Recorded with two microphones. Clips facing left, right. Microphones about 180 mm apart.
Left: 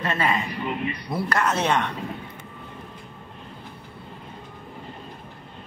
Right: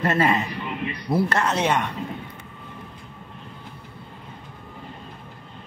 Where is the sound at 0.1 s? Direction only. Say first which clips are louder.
Right 3 dB; 35° right (ahead or behind).